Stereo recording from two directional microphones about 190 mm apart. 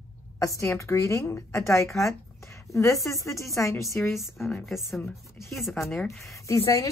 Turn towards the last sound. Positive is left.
turn(degrees=15)  # may be behind; listen again after turning